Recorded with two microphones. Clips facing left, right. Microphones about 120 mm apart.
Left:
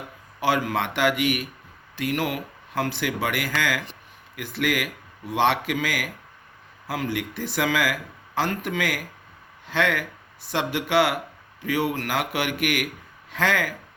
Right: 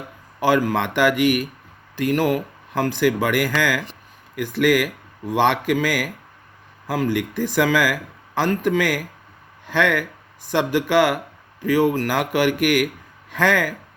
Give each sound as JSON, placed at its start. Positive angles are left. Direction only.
{"t": 0.3, "sound": "speech", "side_deg": -50}